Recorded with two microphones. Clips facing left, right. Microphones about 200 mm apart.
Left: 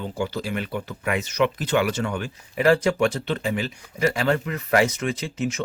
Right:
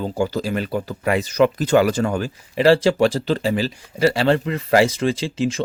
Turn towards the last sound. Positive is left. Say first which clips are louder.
# right 5 dB
turn(degrees=-30)  # may be behind; listen again after turning